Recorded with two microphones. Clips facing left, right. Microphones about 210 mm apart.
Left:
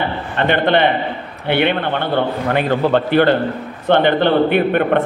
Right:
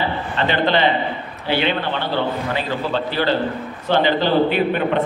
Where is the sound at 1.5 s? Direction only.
60° left (ahead or behind).